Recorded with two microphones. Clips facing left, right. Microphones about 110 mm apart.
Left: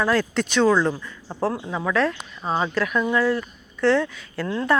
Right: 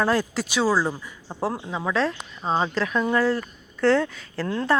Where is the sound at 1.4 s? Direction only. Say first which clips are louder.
Left 2 dB; 25° right (ahead or behind).